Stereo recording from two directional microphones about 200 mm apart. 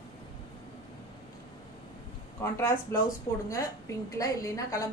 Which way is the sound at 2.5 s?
10° left (ahead or behind).